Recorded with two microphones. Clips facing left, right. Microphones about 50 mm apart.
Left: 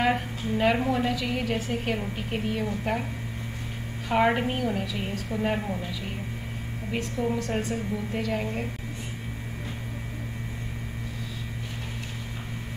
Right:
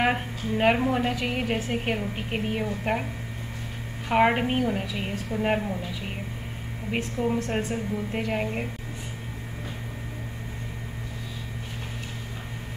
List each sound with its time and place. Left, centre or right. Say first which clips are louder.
0.0 s a woman's voice: even; right
4.1 s a woman's voice: right 2 dB; right
6.9 s a woman's voice: right 2 dB; right